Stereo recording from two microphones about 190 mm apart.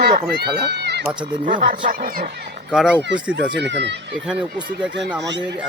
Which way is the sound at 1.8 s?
50° right (ahead or behind).